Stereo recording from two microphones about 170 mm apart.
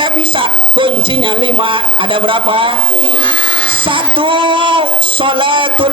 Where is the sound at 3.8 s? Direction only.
30° right (ahead or behind).